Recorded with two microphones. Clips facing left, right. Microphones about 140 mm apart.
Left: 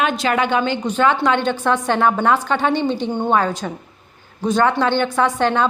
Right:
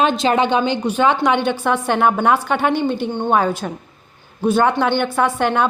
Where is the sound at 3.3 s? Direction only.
10° right (ahead or behind).